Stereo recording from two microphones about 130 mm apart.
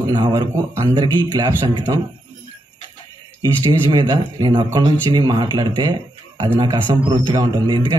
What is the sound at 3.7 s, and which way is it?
A man's voice, 30° right (ahead or behind).